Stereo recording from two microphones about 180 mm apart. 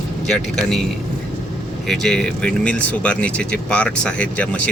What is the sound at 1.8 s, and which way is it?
Speech, 5° left (ahead or behind).